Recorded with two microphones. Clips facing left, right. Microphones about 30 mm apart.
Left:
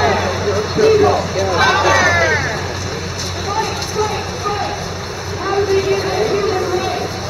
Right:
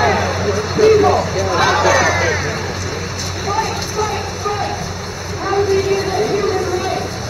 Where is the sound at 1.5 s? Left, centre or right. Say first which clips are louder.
Left 1 dB; centre.